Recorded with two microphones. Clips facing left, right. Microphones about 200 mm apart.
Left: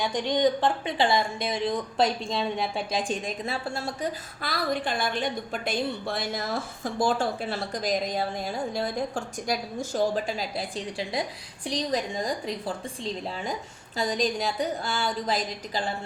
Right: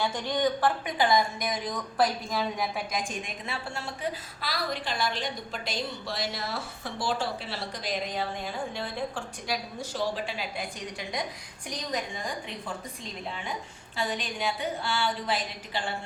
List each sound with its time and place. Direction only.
0.0 s a woman's voice: 20° left (ahead or behind); by 3.8 s 40° left (ahead or behind)
4.4 s a woman's voice: 50° left (ahead or behind)